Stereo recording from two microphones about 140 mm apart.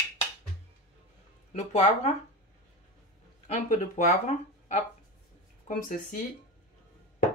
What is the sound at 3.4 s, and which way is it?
Speech, 60° left (ahead or behind).